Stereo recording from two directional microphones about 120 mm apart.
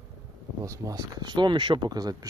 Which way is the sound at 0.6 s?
25° right (ahead or behind).